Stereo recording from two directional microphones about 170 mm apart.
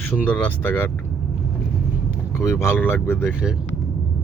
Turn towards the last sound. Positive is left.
turn(degrees=10)  # may be behind; listen again after turning